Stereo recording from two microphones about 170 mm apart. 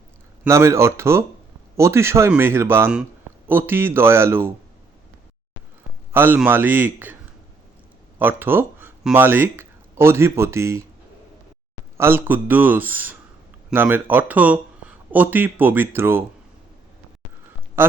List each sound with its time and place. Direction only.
0.4 s speech: 15° right (ahead or behind)
6.1 s speech: 10° right (ahead or behind)
8.2 s speech: 10° right (ahead or behind)
11.9 s speech: 15° right (ahead or behind)
17.8 s quack: 15° right (ahead or behind)